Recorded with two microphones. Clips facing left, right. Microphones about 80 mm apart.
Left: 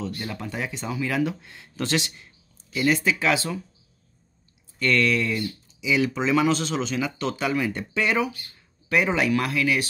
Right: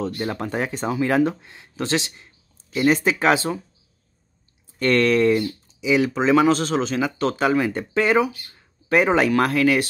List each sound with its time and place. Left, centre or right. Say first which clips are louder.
0.0 s speech: right 6 dB; right
4.7 s speech: right 5 dB; right